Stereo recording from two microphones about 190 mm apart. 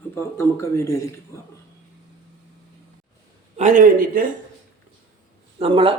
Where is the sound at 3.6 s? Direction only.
40° right (ahead or behind).